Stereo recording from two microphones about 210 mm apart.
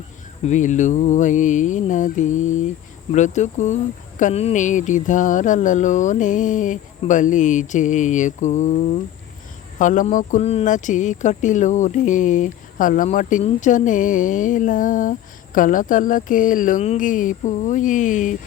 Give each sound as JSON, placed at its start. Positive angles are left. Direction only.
{"t": 0.4, "sound": "speech", "side_deg": 35}